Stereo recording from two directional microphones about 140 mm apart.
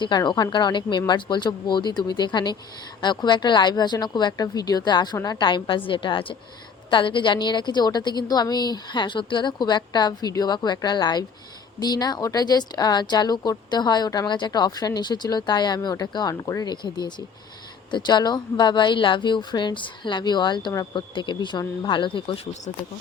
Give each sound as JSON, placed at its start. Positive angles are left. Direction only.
{"t": 0.0, "sound": "a woman's voice", "side_deg": 30}